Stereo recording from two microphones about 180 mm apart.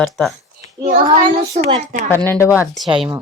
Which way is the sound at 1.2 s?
35° right (ahead or behind).